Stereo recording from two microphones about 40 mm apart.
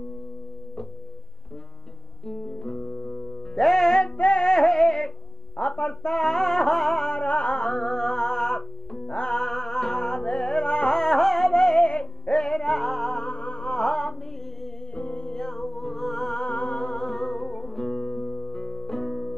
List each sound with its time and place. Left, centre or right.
2.2 s guitar: centre
3.2 s music: centre
4.0 s music: left
5.6 s a sound: left
6.0 s music: centre
7.2 s music: left
11.0 s music: centre
11.5 s music: centre
13.3 s music: left
13.7 s music: centre
15.0 s music: left
15.3 s music: centre
16.3 s music: left; by 19.3 s centre